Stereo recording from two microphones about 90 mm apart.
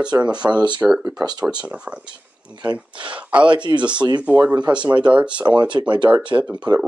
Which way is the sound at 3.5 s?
60° right (ahead or behind).